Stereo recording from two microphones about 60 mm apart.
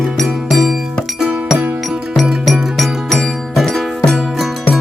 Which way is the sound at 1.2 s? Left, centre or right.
Centre.